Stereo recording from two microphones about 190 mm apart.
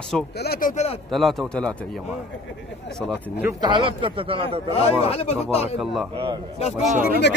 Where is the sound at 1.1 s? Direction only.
Centre (ahead or behind).